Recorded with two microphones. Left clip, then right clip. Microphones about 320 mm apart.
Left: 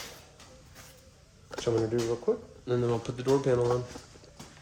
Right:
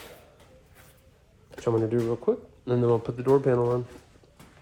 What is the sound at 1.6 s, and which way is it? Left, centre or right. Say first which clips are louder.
Speech: right 3 dB; centre.